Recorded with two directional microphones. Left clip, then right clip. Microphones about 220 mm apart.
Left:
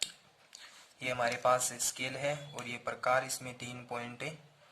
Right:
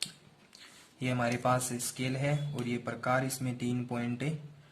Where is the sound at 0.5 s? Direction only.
10° left (ahead or behind).